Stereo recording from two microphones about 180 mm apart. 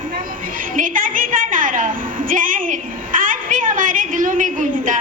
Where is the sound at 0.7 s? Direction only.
50° right (ahead or behind).